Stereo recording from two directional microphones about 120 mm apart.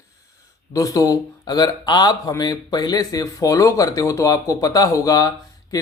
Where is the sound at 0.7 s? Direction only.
30° left (ahead or behind).